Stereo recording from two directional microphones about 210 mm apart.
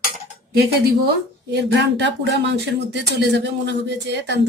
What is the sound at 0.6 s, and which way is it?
A woman's voice, 50° right (ahead or behind).